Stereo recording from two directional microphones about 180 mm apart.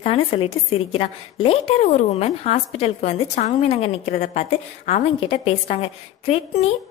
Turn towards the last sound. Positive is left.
turn(degrees=35)  # may be behind; listen again after turning